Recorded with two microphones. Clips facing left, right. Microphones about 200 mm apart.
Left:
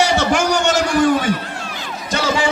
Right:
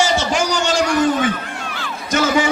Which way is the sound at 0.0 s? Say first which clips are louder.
Left 2 dB; 65° left (ahead or behind).